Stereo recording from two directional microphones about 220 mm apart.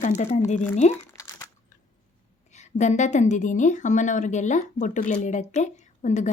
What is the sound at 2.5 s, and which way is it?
A woman's voice, 30° left (ahead or behind).